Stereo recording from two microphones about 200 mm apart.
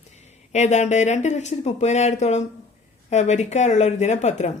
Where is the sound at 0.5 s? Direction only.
35° left (ahead or behind).